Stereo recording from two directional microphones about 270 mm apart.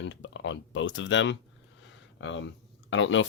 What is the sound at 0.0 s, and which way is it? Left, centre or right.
Speech, left.